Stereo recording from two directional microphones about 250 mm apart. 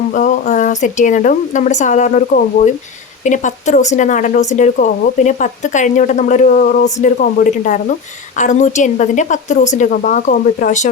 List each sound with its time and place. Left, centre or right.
0.1 s speech: left